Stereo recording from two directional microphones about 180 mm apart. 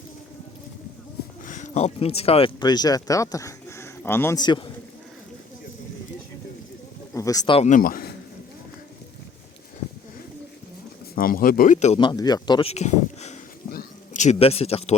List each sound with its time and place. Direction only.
1.5 s speech: 40° left (ahead or behind); by 4.7 s 25° left (ahead or behind)
7.1 s speech: 20° left (ahead or behind)
7.6 s speech: 50° left (ahead or behind)
11.1 s speech: 50° left (ahead or behind)
11.9 s a sound: 25° left (ahead or behind)